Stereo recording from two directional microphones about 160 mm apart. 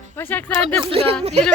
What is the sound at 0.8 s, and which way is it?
Speech, 35° right (ahead or behind).